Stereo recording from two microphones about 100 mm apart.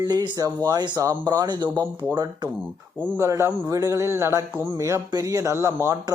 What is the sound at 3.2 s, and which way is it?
Speech, 30° right (ahead or behind).